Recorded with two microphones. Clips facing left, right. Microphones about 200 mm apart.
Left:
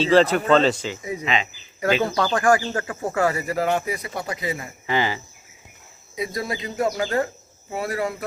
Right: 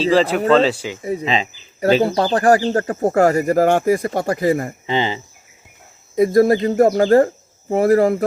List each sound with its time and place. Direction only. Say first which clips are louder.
0.0 s speech: right 2 dB; centre (ahead or behind)
1.0 s speech: right 6 dB; 30° right (ahead or behind); by 4.7 s 50° right (ahead or behind)
4.9 s speech: right 2 dB; 20° right (ahead or behind)
6.1 s speech: right 15 dB; 50° right (ahead or behind)